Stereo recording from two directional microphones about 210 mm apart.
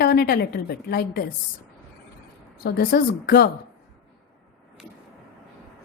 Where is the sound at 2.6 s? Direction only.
50° left (ahead or behind).